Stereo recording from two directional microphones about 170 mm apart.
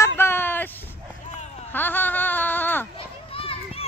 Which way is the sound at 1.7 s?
10° left (ahead or behind).